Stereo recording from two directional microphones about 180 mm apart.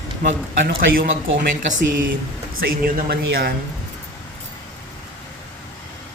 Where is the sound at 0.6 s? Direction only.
55° right (ahead or behind).